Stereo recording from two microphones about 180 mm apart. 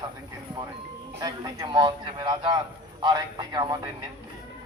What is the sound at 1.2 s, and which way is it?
A man's voice, 25° right (ahead or behind).